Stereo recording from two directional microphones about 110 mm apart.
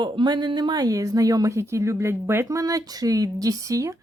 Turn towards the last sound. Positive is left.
turn(degrees=-30)  # may be behind; listen again after turning